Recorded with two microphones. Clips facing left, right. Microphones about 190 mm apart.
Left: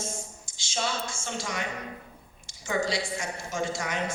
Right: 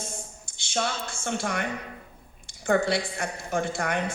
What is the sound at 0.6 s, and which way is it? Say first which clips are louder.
A woman's voice: right 2 dB; 60° right (ahead or behind).